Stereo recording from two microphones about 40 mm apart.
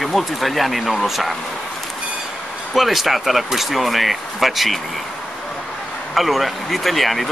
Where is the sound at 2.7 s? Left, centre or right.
Centre.